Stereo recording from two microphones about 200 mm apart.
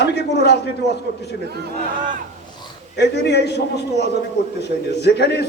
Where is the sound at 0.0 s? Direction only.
55° left (ahead or behind).